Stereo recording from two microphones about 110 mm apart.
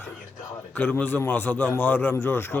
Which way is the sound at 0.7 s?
15° left (ahead or behind).